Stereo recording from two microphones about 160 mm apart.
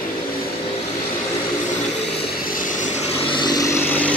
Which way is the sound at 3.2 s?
30° left (ahead or behind).